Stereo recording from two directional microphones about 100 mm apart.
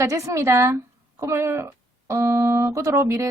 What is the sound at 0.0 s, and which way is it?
A woman's voice, 30° right (ahead or behind).